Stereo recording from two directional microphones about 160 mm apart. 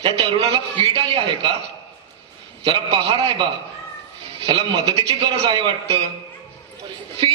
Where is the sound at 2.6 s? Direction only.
40° right (ahead or behind).